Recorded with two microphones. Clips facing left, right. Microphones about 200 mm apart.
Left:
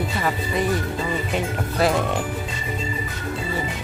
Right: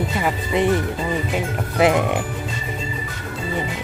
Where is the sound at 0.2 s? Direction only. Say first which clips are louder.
Right 4 dB; 25° right (ahead or behind).